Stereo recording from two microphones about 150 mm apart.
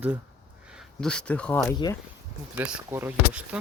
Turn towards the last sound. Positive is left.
turn(degrees=-15)  # may be behind; listen again after turning